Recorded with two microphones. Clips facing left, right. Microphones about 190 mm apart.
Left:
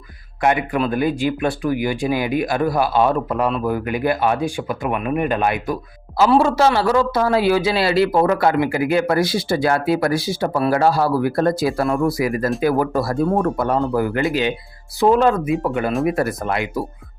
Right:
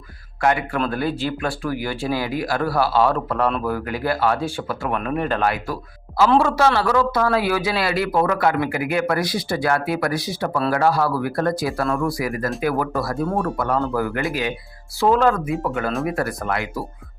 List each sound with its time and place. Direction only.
0.4 s speech: 20° left (ahead or behind)
6.7 s speech: 25° left (ahead or behind)